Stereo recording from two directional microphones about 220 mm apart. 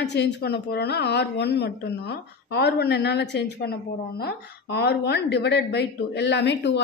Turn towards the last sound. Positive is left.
turn(degrees=50)  # may be behind; listen again after turning